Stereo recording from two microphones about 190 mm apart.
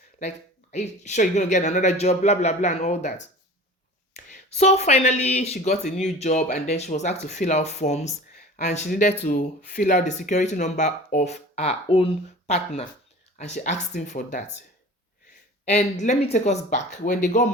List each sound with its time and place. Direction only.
0.2 s speech: 35° left (ahead or behind)
4.3 s speech: 35° left (ahead or behind)
15.6 s speech: 40° left (ahead or behind)